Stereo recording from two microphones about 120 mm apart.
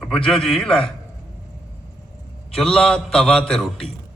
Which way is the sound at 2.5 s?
5° left (ahead or behind).